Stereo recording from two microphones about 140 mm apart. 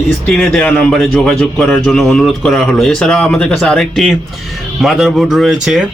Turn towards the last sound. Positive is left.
turn(degrees=0)  # may be behind; listen again after turning